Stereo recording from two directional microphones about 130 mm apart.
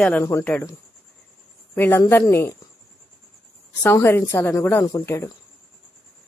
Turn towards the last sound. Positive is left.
turn(degrees=25)  # may be behind; listen again after turning